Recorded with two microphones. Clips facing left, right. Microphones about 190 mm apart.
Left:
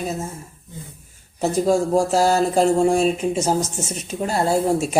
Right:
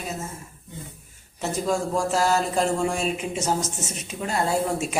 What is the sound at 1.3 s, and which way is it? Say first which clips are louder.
Speech: left 7 dB; 35° left (ahead or behind).